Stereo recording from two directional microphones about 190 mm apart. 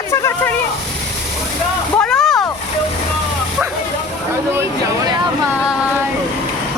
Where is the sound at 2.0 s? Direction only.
Centre (ahead or behind).